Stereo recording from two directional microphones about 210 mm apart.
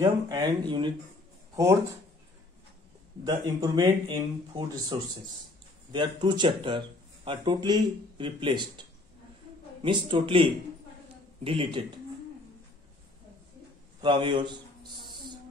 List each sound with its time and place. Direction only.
0.0 s speech: 20° right (ahead or behind)
3.3 s speech: 15° right (ahead or behind)
9.8 s speech: 25° right (ahead or behind)
14.0 s speech: 20° right (ahead or behind)